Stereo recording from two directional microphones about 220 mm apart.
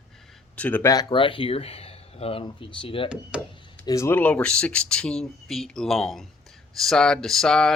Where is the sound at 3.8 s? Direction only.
15° left (ahead or behind).